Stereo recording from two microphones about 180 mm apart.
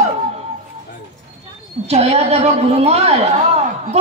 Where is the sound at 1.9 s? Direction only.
35° right (ahead or behind).